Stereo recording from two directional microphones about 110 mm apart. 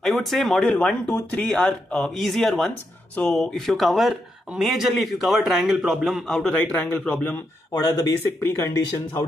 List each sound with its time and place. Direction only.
0.0 s speech: centre (ahead or behind); by 9.2 s 25° left (ahead or behind)